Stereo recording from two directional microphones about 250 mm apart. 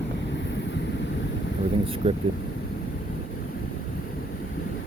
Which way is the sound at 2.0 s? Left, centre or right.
Right.